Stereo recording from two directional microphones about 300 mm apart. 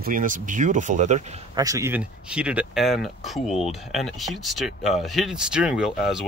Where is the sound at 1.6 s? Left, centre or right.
Centre.